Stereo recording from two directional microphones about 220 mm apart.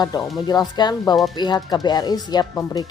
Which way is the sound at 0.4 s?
20° left (ahead or behind).